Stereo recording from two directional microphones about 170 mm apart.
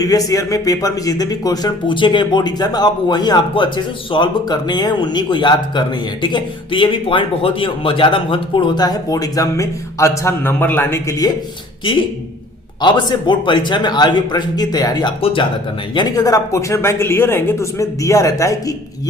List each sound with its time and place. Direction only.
0.0 s speech: 20° left (ahead or behind)
12.8 s speech: 25° left (ahead or behind)